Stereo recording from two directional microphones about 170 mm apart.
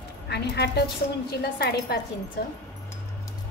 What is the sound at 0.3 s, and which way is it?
Speech, 75° left (ahead or behind).